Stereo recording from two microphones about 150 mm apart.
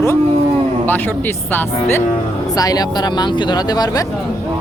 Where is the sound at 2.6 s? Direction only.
25° left (ahead or behind).